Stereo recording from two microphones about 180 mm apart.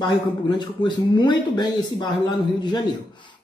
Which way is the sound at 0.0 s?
25° left (ahead or behind).